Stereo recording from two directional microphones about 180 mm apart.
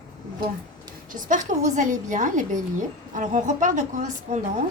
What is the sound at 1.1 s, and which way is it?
A woman's voice, 45° right (ahead or behind).